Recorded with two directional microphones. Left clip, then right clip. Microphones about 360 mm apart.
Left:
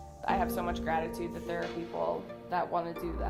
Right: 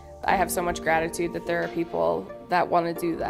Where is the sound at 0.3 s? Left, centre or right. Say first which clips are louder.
Right 7 dB; right.